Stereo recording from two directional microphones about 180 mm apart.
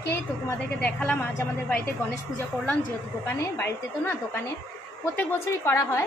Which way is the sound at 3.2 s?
15° left (ahead or behind).